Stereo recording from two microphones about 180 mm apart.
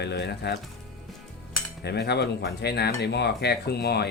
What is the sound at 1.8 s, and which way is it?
Speech, 65° left (ahead or behind).